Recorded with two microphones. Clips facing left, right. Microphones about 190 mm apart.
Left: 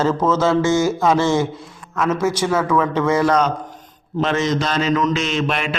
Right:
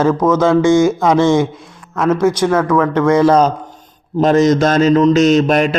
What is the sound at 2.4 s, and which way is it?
Speech, 10° left (ahead or behind).